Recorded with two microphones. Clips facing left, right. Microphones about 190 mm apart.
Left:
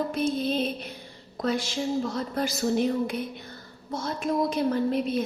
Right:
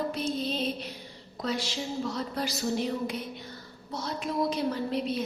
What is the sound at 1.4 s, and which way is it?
A woman's voice, 50° left (ahead or behind).